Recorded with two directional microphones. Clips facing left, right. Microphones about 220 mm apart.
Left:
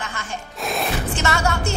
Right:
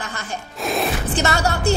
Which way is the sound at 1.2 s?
35° right (ahead or behind).